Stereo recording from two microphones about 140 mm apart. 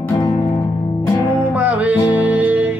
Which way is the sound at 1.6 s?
10° right (ahead or behind).